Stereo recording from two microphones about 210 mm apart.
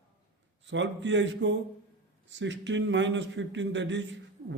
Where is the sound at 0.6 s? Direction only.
60° right (ahead or behind).